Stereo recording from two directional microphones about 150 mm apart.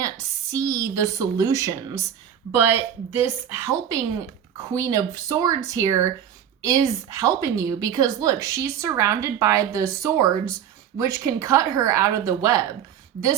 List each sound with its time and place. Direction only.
0.0 s a woman's voice: 20° right (ahead or behind)